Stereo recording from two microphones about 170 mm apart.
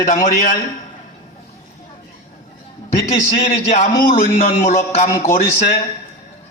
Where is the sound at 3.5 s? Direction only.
45° left (ahead or behind).